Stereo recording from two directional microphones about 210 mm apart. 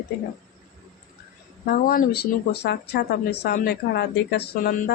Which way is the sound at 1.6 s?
45° left (ahead or behind).